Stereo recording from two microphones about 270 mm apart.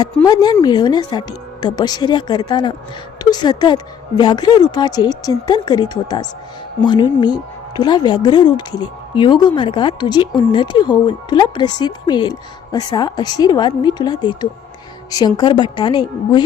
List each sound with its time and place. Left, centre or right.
0.3 s a woman's voice: centre